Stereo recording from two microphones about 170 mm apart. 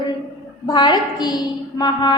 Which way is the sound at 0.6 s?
25° left (ahead or behind).